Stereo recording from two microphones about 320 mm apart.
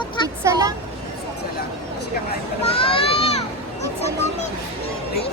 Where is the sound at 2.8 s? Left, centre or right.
Centre.